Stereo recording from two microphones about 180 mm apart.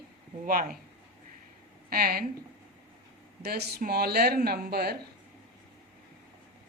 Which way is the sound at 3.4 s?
60° right (ahead or behind).